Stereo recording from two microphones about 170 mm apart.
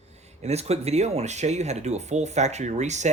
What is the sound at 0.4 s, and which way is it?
Speech, 40° right (ahead or behind).